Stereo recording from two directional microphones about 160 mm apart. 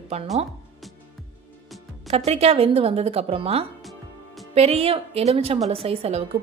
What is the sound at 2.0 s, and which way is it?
A woman's voice, 40° right (ahead or behind).